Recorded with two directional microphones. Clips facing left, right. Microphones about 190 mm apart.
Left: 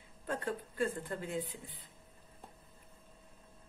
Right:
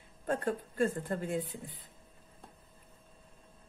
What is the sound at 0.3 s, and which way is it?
Speech, 50° right (ahead or behind).